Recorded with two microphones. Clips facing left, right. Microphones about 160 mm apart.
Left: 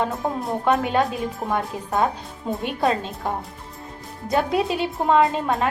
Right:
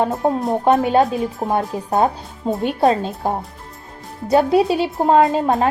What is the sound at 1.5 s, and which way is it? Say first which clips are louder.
A woman's voice: right 4 dB; 35° right (ahead or behind).